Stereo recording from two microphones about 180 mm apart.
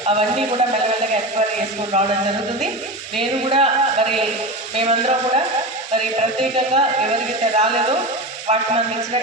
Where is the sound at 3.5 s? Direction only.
35° right (ahead or behind).